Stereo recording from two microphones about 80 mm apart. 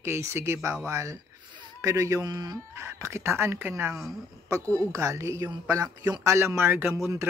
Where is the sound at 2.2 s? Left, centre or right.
Right.